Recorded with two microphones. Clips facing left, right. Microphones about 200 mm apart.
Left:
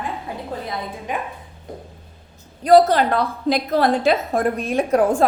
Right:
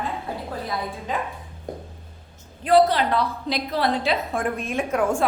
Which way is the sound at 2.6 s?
45° left (ahead or behind).